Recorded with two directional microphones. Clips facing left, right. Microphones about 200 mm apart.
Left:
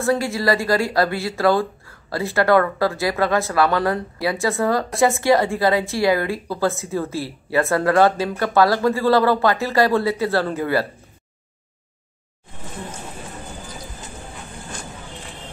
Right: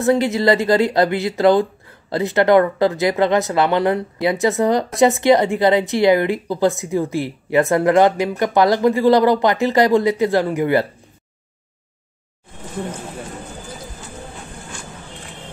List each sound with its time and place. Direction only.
0.0 s speech: 20° right (ahead or behind)